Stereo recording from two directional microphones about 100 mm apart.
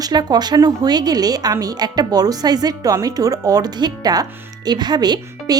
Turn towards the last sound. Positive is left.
turn(degrees=-40)  # may be behind; listen again after turning